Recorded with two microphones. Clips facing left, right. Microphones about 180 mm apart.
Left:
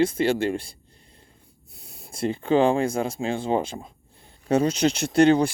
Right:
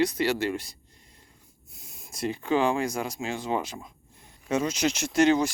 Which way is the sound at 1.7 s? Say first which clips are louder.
Left 4 dB; 35° left (ahead or behind).